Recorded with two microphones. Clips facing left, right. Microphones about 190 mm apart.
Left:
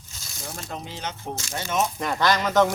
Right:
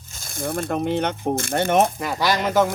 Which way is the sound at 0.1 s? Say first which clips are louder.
Right 12 dB; 50° right (ahead or behind).